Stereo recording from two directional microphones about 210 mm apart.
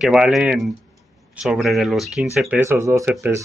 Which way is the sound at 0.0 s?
Centre (ahead or behind).